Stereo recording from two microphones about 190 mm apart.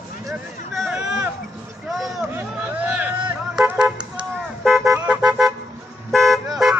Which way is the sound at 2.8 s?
10° right (ahead or behind).